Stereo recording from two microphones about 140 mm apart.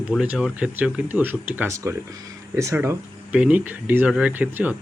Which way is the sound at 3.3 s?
10° right (ahead or behind).